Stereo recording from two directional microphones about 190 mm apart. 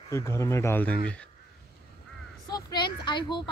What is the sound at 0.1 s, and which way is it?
Speech, 15° left (ahead or behind).